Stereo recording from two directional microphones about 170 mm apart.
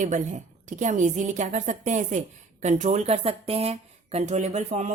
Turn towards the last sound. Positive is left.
turn(degrees=-45)  # may be behind; listen again after turning